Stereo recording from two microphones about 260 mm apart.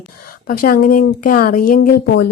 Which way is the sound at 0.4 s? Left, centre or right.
Left.